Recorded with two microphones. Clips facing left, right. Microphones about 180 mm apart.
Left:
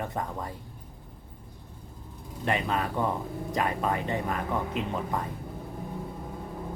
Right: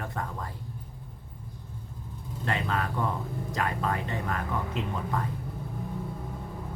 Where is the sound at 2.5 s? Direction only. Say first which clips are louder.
Left 2 dB; 20° left (ahead or behind).